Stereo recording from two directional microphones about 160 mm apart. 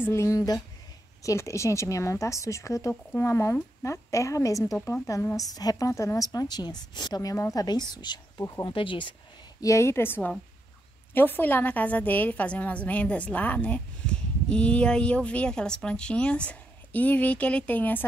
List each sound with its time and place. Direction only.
0.0 s a woman's voice: 15° left (ahead or behind)
9.6 s a woman's voice: 20° left (ahead or behind)